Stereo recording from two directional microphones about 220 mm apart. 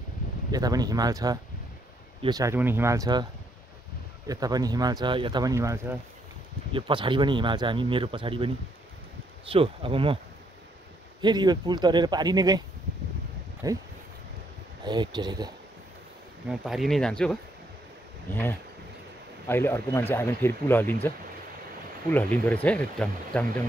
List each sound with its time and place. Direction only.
0.5 s speech: 15° right (ahead or behind)
4.3 s speech: 15° right (ahead or behind)
9.5 s speech: 25° right (ahead or behind)
11.1 s speech: 20° right (ahead or behind)
14.9 s speech: 20° right (ahead or behind)
16.4 s speech: centre (ahead or behind)
22.1 s speech: 10° left (ahead or behind)